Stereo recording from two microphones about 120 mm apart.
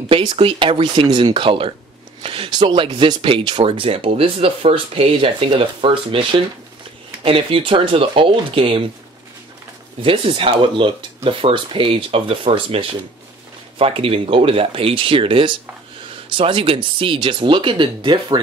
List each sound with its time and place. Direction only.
0.1 s speech: 45° right (ahead or behind)
10.0 s speech: 50° right (ahead or behind)